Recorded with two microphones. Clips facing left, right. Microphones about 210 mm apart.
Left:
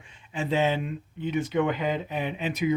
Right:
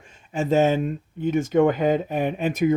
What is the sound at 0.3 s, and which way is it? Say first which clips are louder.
Speech: right 6 dB; 45° right (ahead or behind).